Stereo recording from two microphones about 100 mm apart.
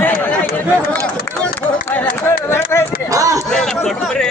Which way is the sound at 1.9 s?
20° left (ahead or behind).